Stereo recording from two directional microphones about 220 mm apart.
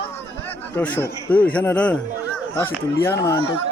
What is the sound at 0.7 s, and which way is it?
Speech, 10° left (ahead or behind).